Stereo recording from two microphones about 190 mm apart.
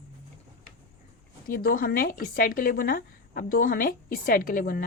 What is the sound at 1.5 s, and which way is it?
A woman's voice, 50° left (ahead or behind).